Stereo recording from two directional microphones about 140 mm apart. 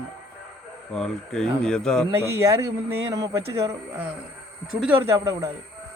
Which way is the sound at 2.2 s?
20° right (ahead or behind).